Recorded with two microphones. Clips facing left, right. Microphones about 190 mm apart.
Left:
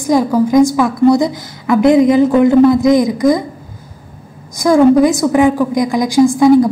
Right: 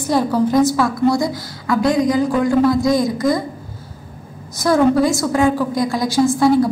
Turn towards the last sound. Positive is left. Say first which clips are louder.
# left 6 dB
turn(degrees=15)  # may be behind; listen again after turning